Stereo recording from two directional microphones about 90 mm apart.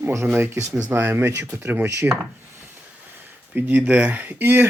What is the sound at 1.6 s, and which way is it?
Speech, 20° right (ahead or behind).